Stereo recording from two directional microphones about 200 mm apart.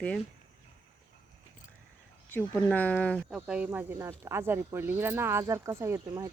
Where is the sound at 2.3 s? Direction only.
10° left (ahead or behind).